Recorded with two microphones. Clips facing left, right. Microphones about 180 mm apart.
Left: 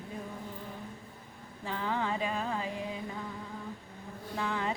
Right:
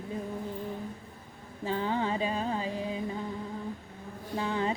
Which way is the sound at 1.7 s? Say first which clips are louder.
Right 3 dB; 25° right (ahead or behind).